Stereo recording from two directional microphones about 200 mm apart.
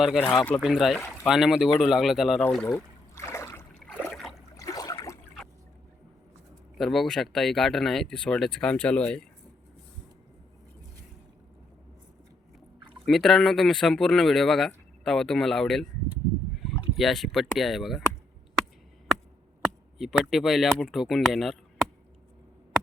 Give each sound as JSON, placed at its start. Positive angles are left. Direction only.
{"t": 0.0, "sound": "speech", "side_deg": 0}
{"t": 4.0, "sound": "water", "side_deg": 5}
{"t": 4.5, "sound": "a sound", "side_deg": 15}
{"t": 6.7, "sound": "speech", "side_deg": 0}
{"t": 13.1, "sound": "speech", "side_deg": 0}
{"t": 17.0, "sound": "speech", "side_deg": 0}
{"t": 20.0, "sound": "speech", "side_deg": 0}